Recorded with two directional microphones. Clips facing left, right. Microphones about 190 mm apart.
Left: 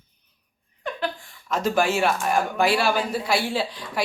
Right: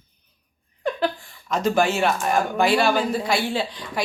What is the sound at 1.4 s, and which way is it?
Speech, 5° left (ahead or behind).